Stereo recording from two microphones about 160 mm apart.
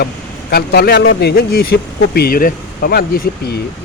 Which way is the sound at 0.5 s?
75° left (ahead or behind).